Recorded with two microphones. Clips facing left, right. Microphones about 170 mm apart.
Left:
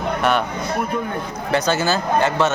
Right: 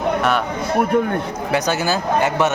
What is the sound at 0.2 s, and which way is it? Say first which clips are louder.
Speech: even; centre (ahead or behind).